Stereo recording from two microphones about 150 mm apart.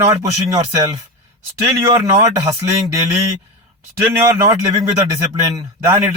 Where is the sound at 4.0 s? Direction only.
15° right (ahead or behind).